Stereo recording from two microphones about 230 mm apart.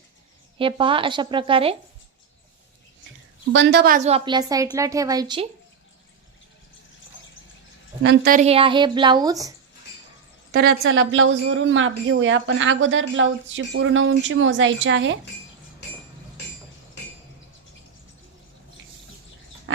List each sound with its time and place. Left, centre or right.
0.6 s a woman's voice: right
3.5 s a woman's voice: right; by 5.5 s centre
8.0 s a woman's voice: right; by 9.5 s centre
10.5 s a woman's voice: right